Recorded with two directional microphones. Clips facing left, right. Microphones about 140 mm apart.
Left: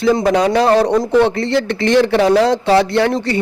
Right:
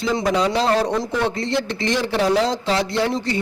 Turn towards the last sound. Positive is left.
turn(degrees=65)  # may be behind; listen again after turning